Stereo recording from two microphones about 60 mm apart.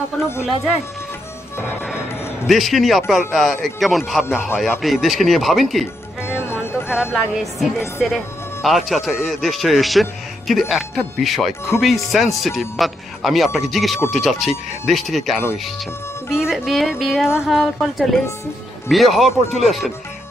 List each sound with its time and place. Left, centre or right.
0.1 s speech: centre
2.4 s a man's voice: centre
6.2 s music: left
7.8 s a man's voice: centre
16.3 s a man's voice: centre